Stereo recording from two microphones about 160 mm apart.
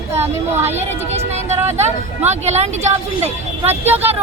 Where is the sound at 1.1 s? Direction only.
45° right (ahead or behind).